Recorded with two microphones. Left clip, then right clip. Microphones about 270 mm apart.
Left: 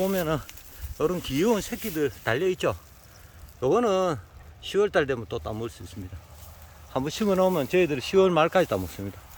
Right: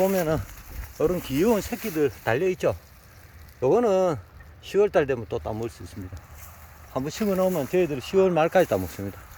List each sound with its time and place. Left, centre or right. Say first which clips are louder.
0.0 s speech: right 3 dB; centre
6.9 s speech: left 1 dB; centre